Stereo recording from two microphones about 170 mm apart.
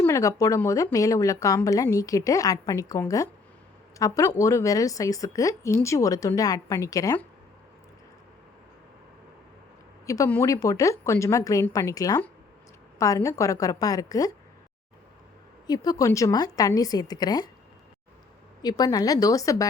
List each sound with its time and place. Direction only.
0.0 s a woman's voice: 20° left (ahead or behind)
10.1 s a woman's voice: 15° left (ahead or behind)
15.6 s a woman's voice: 25° left (ahead or behind)
18.6 s a woman's voice: 20° left (ahead or behind)